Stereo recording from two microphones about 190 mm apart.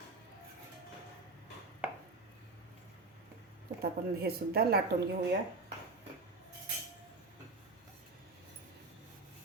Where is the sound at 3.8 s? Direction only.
55° right (ahead or behind).